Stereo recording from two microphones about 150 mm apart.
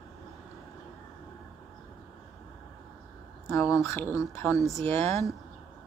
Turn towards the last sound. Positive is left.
turn(degrees=15)  # may be behind; listen again after turning